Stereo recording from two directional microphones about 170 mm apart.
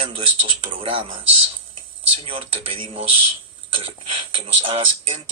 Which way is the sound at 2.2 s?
35° right (ahead or behind).